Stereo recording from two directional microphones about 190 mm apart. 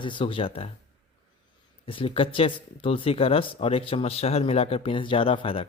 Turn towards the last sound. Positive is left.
turn(degrees=30)  # may be behind; listen again after turning